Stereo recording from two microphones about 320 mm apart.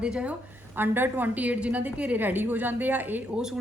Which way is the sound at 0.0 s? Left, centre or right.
Centre.